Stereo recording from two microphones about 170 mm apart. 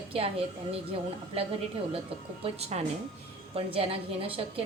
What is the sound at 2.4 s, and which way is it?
A woman's voice, 35° right (ahead or behind).